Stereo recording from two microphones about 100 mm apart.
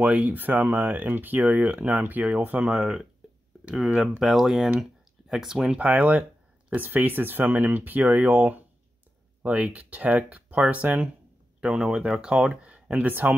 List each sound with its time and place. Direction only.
0.0 s speech: 15° right (ahead or behind)
2.6 s speech: 5° right (ahead or behind)
11.6 s speech: 5° right (ahead or behind)